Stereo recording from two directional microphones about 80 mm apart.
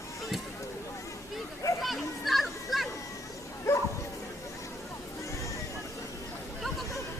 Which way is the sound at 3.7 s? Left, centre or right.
Left.